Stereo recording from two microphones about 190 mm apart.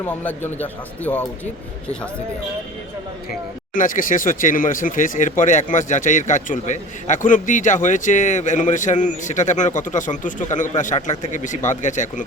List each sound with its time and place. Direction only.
0.0 s speech: 10° left (ahead or behind)
3.8 s speech: 45° left (ahead or behind)